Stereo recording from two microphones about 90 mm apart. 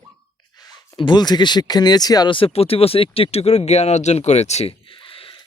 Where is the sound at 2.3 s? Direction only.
85° left.